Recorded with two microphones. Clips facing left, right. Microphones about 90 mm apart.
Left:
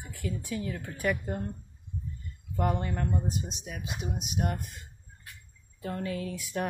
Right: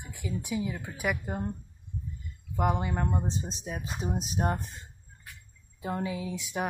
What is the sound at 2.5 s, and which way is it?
Speech, 10° right (ahead or behind).